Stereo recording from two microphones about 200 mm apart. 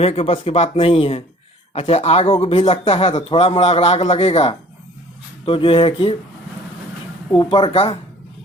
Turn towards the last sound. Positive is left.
turn(degrees=30)  # may be behind; listen again after turning